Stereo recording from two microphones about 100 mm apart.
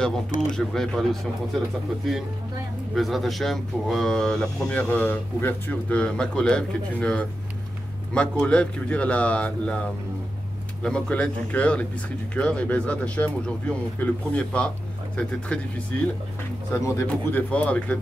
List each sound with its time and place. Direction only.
0.0 s speech: 5° left (ahead or behind)
2.9 s speech: centre (ahead or behind)
10.8 s speech: 10° left (ahead or behind)
16.7 s speech: 30° left (ahead or behind)
17.3 s speech: 15° left (ahead or behind)